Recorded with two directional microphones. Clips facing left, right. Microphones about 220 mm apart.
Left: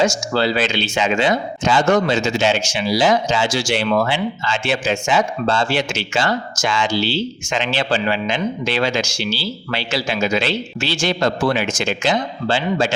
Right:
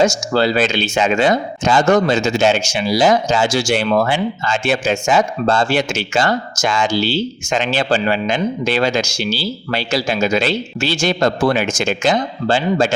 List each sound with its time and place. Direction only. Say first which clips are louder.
0.0 s speech: right 3 dB; 45° right (ahead or behind)